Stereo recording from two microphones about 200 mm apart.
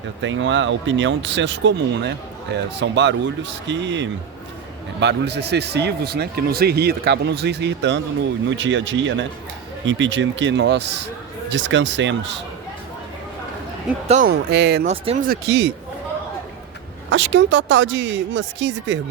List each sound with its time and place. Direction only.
0.2 s speech: 70° right (ahead or behind)
14.1 s speech: 45° right (ahead or behind)
14.8 s speech: 35° right (ahead or behind)
15.4 s speech: 65° right (ahead or behind)
17.1 s speech: 70° right (ahead or behind)